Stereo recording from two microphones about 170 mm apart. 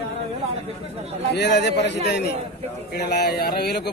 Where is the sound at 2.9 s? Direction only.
75° left (ahead or behind).